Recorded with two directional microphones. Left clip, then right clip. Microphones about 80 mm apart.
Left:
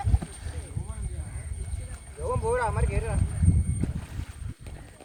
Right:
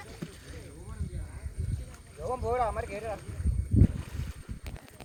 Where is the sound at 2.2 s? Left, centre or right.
Left.